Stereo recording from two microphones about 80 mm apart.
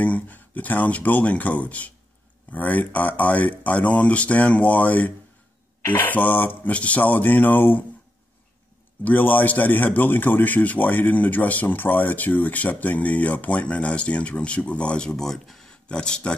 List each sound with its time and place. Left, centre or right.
0.0 s a man's voice: centre
9.0 s a man's voice: left